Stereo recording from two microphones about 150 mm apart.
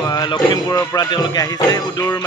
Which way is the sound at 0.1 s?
30° left (ahead or behind).